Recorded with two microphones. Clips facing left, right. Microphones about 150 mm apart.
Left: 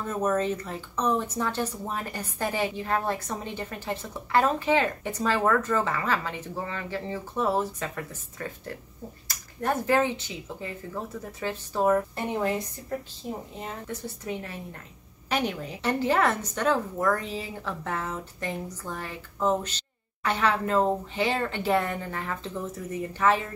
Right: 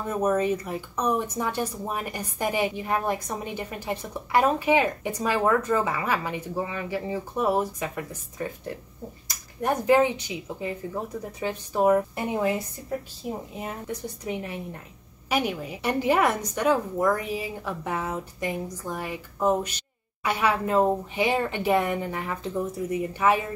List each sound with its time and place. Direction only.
0.0 s speech: 10° right (ahead or behind)